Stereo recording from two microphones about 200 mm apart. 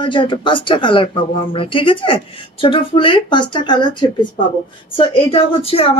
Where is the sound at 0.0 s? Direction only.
25° left (ahead or behind).